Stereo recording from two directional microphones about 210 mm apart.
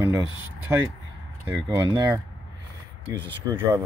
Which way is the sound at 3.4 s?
5° right (ahead or behind).